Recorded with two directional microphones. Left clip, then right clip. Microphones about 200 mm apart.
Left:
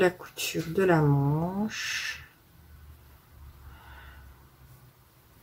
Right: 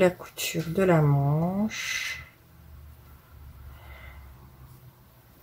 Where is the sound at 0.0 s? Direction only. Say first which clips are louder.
Right 2 dB; 15° left (ahead or behind).